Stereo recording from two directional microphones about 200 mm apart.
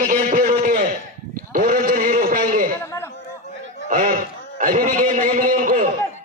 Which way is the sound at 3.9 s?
45° right (ahead or behind).